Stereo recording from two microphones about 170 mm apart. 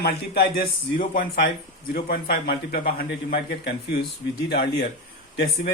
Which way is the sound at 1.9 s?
65° left (ahead or behind).